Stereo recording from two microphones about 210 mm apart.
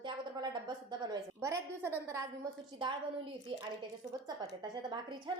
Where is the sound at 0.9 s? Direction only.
15° right (ahead or behind).